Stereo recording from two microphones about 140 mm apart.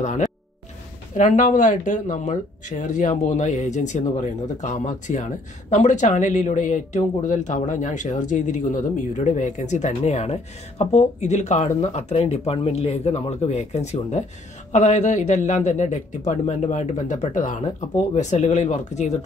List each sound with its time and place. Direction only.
1.1 s speech: 60° left (ahead or behind)